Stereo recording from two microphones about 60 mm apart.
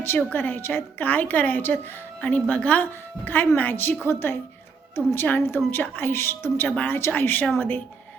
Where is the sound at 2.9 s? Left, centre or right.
Left.